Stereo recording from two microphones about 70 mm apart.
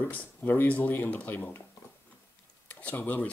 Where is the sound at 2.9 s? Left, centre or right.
Left.